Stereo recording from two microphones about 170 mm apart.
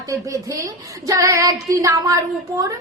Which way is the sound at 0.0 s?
20° right (ahead or behind).